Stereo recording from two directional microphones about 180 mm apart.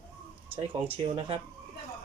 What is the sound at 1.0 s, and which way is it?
Speech, 30° right (ahead or behind).